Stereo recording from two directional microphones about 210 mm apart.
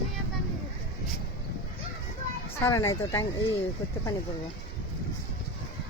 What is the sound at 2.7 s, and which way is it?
Speech, 15° left (ahead or behind).